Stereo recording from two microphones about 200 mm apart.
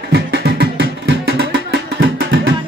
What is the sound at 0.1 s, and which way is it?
Music, 55° right (ahead or behind).